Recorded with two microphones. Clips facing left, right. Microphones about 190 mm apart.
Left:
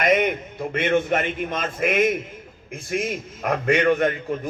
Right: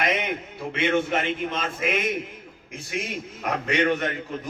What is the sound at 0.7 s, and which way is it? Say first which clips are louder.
A man's voice: left 2 dB; 50° left (ahead or behind).